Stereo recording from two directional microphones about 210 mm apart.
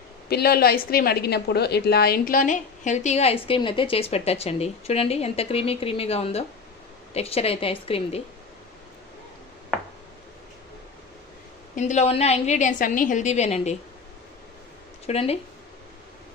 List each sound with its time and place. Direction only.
0.3 s a woman's voice: 50° left (ahead or behind); by 8.2 s 25° left (ahead or behind)
11.7 s a woman's voice: 35° left (ahead or behind)
15.0 s a woman's voice: 30° left (ahead or behind)